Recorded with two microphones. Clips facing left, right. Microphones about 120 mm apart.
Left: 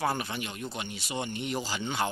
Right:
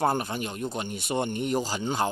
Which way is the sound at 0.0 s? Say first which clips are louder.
Right 5 dB; 45° right (ahead or behind).